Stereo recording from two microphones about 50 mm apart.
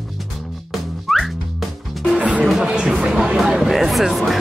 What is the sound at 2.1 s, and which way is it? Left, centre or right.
Music, right.